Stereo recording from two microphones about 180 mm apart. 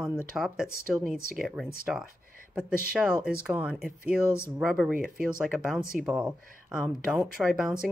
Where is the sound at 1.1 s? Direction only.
55° right (ahead or behind).